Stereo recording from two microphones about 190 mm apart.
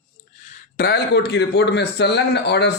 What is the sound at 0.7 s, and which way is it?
Speech, 55° left (ahead or behind).